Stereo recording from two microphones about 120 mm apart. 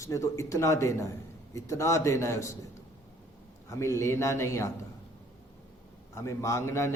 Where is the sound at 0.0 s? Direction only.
25° left (ahead or behind).